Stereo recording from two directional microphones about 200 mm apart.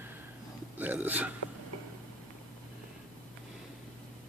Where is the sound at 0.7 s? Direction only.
10° right (ahead or behind).